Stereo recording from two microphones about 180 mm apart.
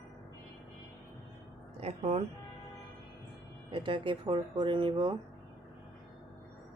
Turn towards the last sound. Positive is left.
turn(degrees=-25)  # may be behind; listen again after turning